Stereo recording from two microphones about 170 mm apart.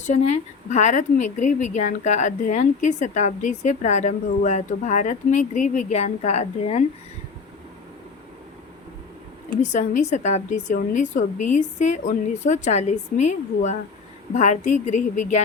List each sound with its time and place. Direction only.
0.0 s speech: 45° left (ahead or behind)
9.5 s speech: 45° left (ahead or behind)